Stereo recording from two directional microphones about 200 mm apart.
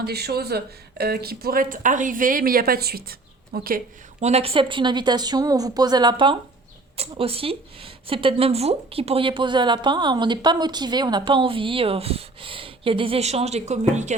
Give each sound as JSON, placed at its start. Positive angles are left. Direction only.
{"t": 0.0, "sound": "speech", "side_deg": -55}
{"t": 4.2, "sound": "a woman's voice", "side_deg": -30}